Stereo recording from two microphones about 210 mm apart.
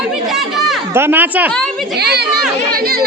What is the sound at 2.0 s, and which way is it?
Speech, 50° right (ahead or behind).